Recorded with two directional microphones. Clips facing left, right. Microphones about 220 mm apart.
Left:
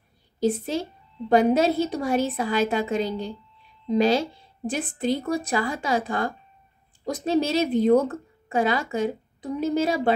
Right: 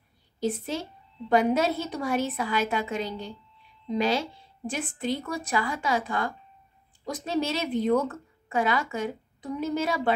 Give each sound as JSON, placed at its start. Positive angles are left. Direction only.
{"t": 0.4, "sound": "a woman's voice", "side_deg": 35}